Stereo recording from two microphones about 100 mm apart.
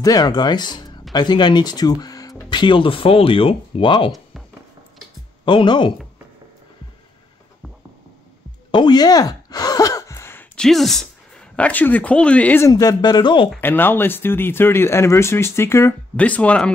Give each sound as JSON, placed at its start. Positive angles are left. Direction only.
{"t": 0.0, "sound": "speech", "side_deg": 40}
{"t": 2.5, "sound": "speech", "side_deg": 55}
{"t": 5.4, "sound": "speech", "side_deg": 55}
{"t": 8.7, "sound": "a sound", "side_deg": 45}
{"t": 10.5, "sound": "speech", "side_deg": 5}
{"t": 12.6, "sound": "speech", "side_deg": 40}
{"t": 13.6, "sound": "speech", "side_deg": 20}
{"t": 16.2, "sound": "speech", "side_deg": 15}